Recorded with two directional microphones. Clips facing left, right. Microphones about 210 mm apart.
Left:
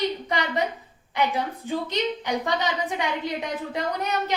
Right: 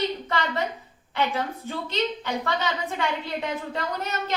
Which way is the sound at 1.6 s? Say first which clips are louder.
Left 4 dB; 15° left (ahead or behind).